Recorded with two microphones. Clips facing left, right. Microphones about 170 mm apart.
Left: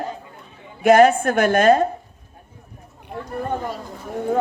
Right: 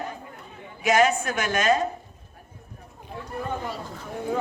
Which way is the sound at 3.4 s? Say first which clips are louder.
Left 5 dB; 50° left (ahead or behind).